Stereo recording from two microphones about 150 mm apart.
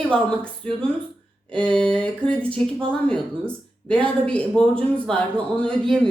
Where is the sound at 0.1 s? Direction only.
5° left (ahead or behind).